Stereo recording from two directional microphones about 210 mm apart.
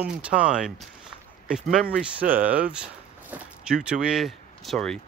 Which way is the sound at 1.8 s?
40° right (ahead or behind).